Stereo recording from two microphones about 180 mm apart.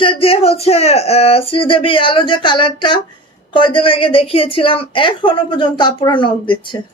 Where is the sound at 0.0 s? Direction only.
30° left (ahead or behind).